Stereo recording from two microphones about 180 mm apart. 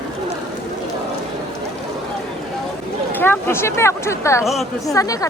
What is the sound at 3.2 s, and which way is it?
Speech, 10° left (ahead or behind).